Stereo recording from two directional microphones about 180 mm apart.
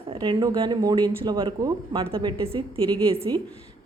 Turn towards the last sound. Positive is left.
turn(degrees=-30)  # may be behind; listen again after turning